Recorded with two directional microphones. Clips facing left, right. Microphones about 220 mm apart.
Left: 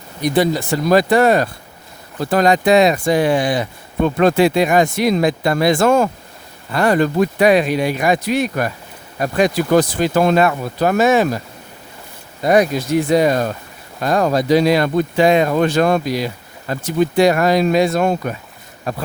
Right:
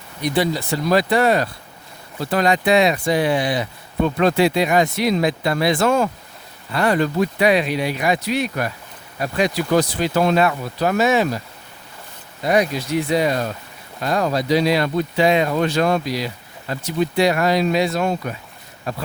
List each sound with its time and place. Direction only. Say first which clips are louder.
0.2 s speech: left 4 dB; 45° left (ahead or behind)
12.5 s speech: left 4 dB; 45° left (ahead or behind)